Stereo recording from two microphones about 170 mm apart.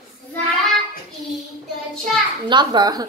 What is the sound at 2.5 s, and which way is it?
Speech, 25° right (ahead or behind).